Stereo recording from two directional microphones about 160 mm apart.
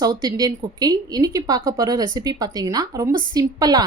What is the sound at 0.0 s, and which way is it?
A woman's voice, 25° right (ahead or behind).